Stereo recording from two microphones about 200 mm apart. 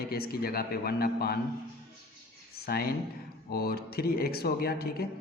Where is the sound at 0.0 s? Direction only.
50° left (ahead or behind).